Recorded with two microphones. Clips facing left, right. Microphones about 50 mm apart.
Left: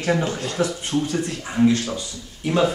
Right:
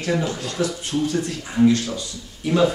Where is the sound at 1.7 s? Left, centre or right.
Left.